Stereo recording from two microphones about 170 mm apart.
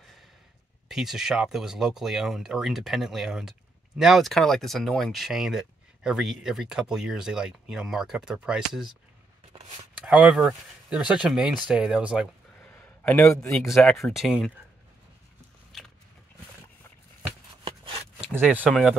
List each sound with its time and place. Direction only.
0.8 s speech: centre (ahead or behind)
9.9 s speech: 5° right (ahead or behind)
13.0 s speech: 10° left (ahead or behind)
15.7 s a sound: centre (ahead or behind)
17.6 s a sound: 30° right (ahead or behind)
18.3 s speech: 10° right (ahead or behind)